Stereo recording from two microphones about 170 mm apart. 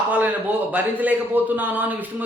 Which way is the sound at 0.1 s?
10° right (ahead or behind).